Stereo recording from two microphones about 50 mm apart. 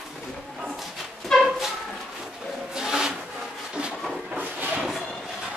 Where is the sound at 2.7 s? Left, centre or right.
Centre.